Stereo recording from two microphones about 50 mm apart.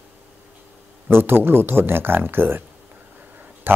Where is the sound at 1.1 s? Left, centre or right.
Right.